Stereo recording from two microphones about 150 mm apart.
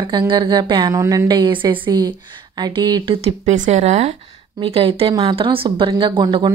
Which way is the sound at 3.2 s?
50° right (ahead or behind).